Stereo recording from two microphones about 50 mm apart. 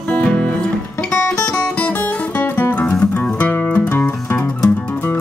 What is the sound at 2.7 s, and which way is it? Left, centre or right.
Music, left.